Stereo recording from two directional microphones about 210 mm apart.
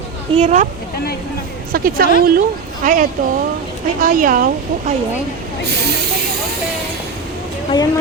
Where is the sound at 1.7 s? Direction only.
45° right (ahead or behind).